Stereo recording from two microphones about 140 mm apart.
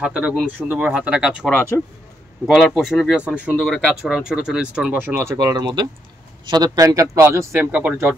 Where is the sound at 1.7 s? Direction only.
10° left (ahead or behind).